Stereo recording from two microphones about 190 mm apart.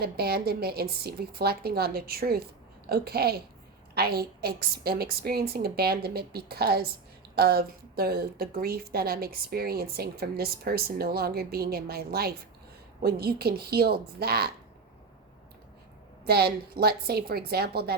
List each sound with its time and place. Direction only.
0.0 s a woman's voice: 55° right (ahead or behind)
16.2 s a woman's voice: 55° right (ahead or behind)